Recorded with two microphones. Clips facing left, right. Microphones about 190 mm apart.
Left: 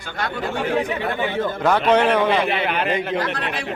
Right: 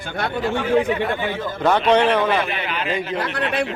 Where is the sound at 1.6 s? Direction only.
5° left (ahead or behind).